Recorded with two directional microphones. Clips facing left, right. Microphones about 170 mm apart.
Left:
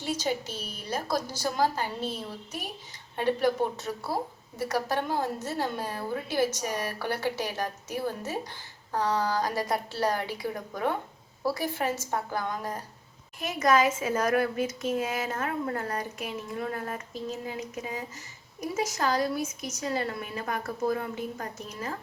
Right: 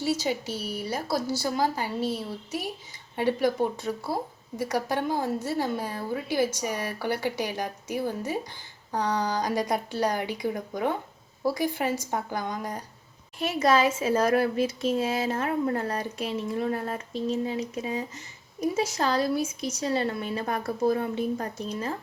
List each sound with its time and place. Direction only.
0.0 s a woman's voice: 10° right (ahead or behind)
13.4 s speech: 30° right (ahead or behind)